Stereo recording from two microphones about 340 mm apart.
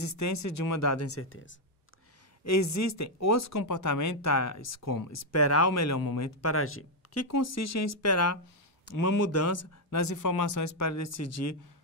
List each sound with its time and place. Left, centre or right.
0.0 s speech: left
2.4 s speech: left
3.5 s speech: left
8.9 s speech: left
9.2 s speech: left